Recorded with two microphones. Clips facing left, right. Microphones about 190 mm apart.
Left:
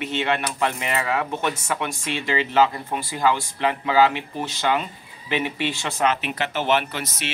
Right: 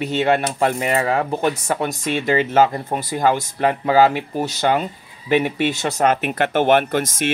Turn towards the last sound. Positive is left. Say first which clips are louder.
# right 10 dB
turn(degrees=-50)  # may be behind; listen again after turning